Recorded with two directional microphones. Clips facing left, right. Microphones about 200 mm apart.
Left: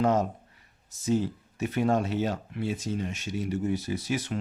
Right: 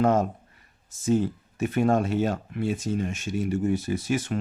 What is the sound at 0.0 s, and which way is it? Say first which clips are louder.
Speech: right 3 dB; 50° right (ahead or behind).